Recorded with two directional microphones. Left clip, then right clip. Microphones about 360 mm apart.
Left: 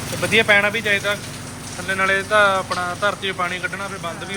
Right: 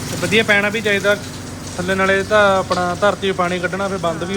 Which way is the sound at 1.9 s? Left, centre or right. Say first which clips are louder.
Right 3 dB; centre.